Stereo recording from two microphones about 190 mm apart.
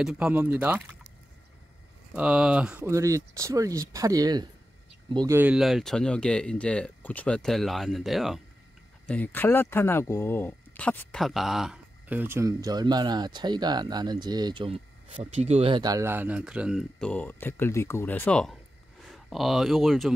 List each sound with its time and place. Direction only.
0.0 s speech: 5° right (ahead or behind)
2.1 s speech: 5° right (ahead or behind)